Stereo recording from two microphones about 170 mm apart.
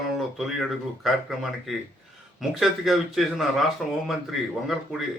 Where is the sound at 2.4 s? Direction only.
Centre (ahead or behind).